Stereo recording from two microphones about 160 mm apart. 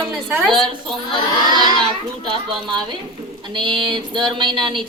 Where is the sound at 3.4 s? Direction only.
30° right (ahead or behind).